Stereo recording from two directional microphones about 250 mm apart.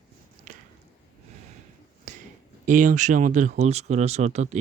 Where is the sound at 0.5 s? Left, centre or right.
Right.